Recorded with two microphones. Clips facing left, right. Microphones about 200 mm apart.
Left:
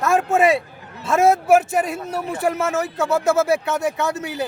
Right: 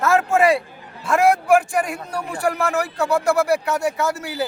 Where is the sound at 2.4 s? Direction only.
20° left (ahead or behind).